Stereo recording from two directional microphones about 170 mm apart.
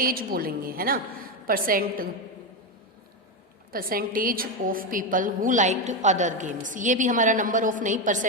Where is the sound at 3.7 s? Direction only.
60° right (ahead or behind).